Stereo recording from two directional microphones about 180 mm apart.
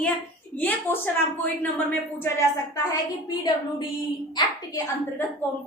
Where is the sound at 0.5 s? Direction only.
10° left (ahead or behind).